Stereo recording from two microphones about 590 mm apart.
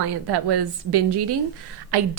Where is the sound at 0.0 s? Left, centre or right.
Right.